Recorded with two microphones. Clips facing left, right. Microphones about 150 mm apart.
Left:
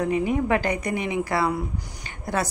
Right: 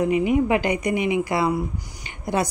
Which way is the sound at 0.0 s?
10° right (ahead or behind).